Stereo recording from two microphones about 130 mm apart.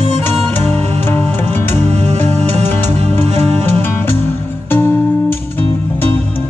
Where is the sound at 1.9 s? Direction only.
55° right (ahead or behind).